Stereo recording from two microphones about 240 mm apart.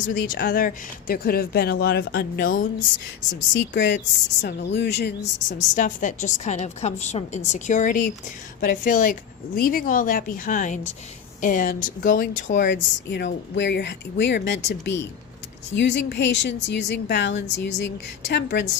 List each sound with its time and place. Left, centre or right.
0.3 s speech: left
3.5 s speech: left
5.5 s speech: left